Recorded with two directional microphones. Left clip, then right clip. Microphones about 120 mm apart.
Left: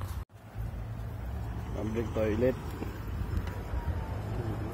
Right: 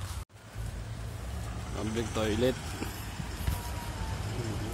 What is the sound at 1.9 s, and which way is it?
Speech, 35° right (ahead or behind).